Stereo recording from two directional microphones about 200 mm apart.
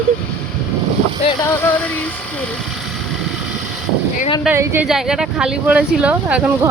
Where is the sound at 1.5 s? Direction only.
10° left (ahead or behind).